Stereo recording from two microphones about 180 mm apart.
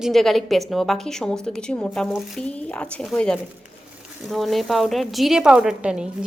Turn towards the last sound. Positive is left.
turn(degrees=-5)  # may be behind; listen again after turning